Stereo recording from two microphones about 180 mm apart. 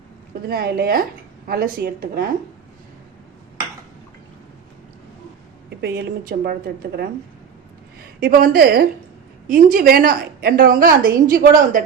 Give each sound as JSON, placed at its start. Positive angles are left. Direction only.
{"t": 0.4, "sound": "a woman's voice", "side_deg": -60}
{"t": 5.8, "sound": "a woman's voice", "side_deg": -65}